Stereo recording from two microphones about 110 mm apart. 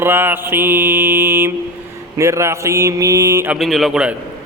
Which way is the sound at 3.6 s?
Centre (ahead or behind).